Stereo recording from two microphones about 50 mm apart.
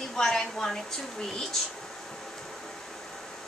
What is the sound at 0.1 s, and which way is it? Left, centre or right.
Speech, centre.